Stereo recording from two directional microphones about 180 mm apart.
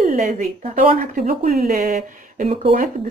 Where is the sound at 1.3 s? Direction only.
55° right (ahead or behind).